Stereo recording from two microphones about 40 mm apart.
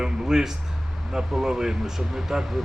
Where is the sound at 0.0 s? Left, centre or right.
Centre.